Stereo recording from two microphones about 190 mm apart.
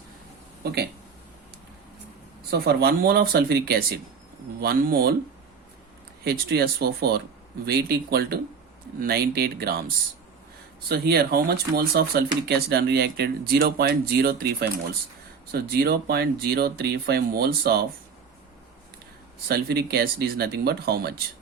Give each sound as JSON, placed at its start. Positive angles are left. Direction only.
{"t": 0.6, "sound": "speech", "side_deg": -60}
{"t": 2.5, "sound": "speech", "side_deg": -55}
{"t": 6.2, "sound": "speech", "side_deg": -55}
{"t": 19.5, "sound": "speech", "side_deg": -55}